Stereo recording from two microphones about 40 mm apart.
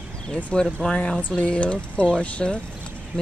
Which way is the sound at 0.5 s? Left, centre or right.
Left.